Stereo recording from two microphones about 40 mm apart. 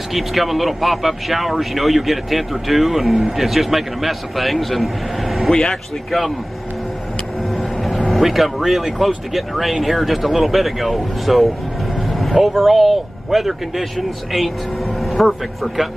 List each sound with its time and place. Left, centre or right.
0.1 s speech: centre
5.5 s speech: centre
8.1 s speech: centre
12.1 s vehicle: centre
12.4 s speech: centre